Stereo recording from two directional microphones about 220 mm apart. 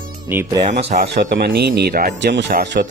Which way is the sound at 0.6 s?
30° right (ahead or behind).